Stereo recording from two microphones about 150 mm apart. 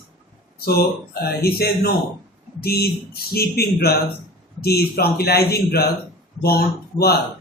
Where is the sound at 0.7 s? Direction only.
90° left.